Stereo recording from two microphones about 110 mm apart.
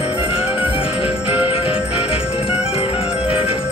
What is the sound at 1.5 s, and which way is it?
Jingle bell, 60° left (ahead or behind).